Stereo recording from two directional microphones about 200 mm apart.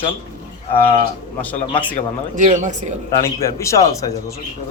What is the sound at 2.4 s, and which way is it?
Speech, 40° right (ahead or behind).